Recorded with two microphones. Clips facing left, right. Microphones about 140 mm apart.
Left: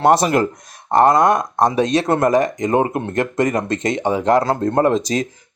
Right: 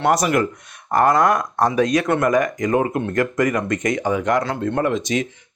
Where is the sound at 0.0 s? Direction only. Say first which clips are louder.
Left 3 dB; 30° left (ahead or behind).